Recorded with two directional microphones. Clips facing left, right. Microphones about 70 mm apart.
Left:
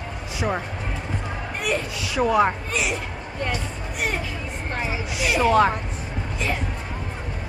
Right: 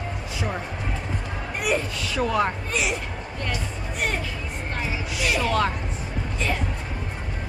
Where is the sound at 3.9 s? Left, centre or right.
Centre.